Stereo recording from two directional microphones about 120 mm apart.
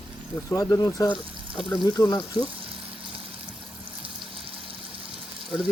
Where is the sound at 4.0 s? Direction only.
50° right (ahead or behind).